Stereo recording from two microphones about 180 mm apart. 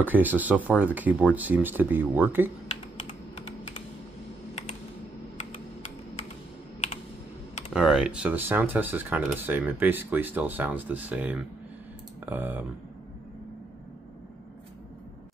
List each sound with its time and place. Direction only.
0.0 s speech: 10° right (ahead or behind)
5.4 s computer keyboard: 40° left (ahead or behind)
7.7 s speech: 5° right (ahead or behind)